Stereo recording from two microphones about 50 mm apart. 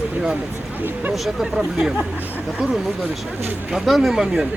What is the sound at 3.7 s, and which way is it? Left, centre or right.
Speech, centre.